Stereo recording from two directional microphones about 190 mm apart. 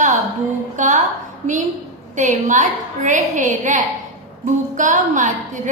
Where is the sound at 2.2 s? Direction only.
40° right (ahead or behind).